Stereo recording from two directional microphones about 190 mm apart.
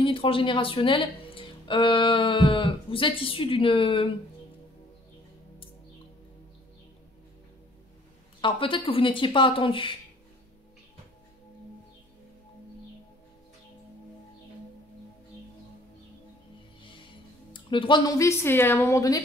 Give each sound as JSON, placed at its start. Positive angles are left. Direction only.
{"t": 0.0, "sound": "speech", "side_deg": 30}
{"t": 8.4, "sound": "speech", "side_deg": 25}
{"t": 17.5, "sound": "speech", "side_deg": 25}